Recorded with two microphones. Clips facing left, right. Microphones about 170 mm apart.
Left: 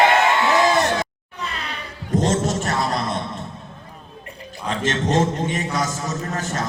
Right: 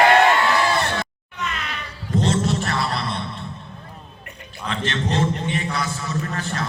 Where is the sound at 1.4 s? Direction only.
35° left (ahead or behind).